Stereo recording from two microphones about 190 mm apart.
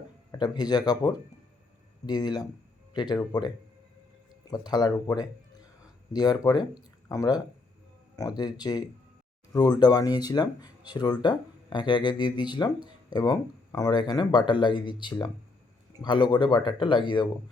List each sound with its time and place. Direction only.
0.3 s speech: 20° left (ahead or behind)
16.0 s speech: 25° left (ahead or behind)